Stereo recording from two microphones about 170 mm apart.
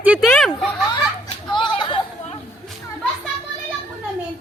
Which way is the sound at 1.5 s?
30° left (ahead or behind).